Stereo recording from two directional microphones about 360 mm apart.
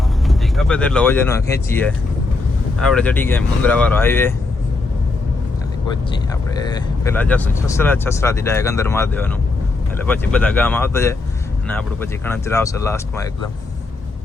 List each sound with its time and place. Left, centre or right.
0.3 s speech: centre
6.7 s speech: centre